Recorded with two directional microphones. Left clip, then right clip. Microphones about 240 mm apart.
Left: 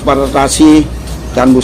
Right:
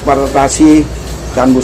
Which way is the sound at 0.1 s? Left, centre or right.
Left.